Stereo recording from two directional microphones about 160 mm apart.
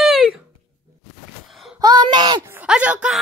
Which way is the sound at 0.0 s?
Centre (ahead or behind).